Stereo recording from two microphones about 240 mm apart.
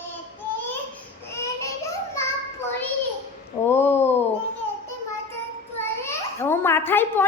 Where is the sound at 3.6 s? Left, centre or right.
Centre.